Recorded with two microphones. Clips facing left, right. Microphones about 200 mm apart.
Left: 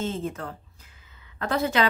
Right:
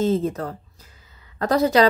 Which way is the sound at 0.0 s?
35° right (ahead or behind).